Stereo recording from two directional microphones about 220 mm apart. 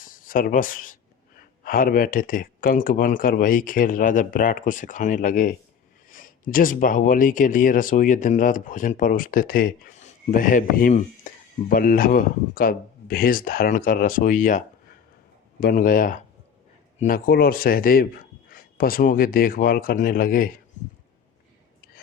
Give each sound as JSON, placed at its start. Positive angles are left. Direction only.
{"t": 0.0, "sound": "speech", "side_deg": 40}
{"t": 15.6, "sound": "speech", "side_deg": 40}